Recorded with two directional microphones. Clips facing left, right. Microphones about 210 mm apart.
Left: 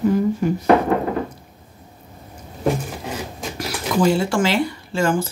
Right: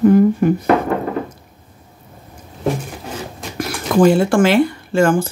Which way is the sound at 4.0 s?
55° right (ahead or behind).